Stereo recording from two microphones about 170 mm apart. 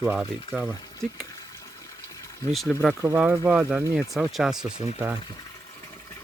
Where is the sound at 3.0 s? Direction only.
10° right (ahead or behind).